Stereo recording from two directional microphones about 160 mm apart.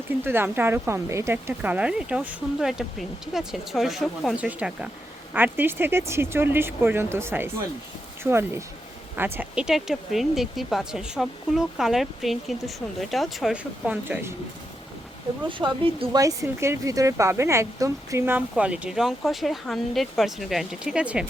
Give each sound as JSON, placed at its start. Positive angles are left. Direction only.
{"t": 0.3, "sound": "speech", "side_deg": -15}
{"t": 15.4, "sound": "speech", "side_deg": -30}
{"t": 16.2, "sound": "speech", "side_deg": -20}